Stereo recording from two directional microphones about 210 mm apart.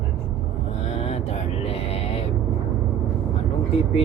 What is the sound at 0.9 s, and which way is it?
Vehicle, 30° left (ahead or behind).